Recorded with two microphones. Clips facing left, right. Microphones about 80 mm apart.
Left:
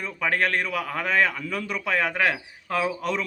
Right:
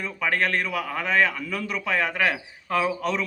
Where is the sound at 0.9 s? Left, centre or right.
Left.